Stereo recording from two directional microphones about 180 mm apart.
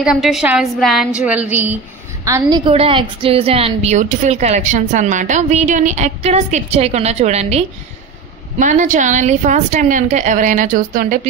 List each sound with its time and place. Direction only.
0.0 s a woman's voice: centre (ahead or behind); by 2.7 s 20° right (ahead or behind)
2.7 s a woman's voice: 30° right (ahead or behind); by 11.1 s 50° right (ahead or behind)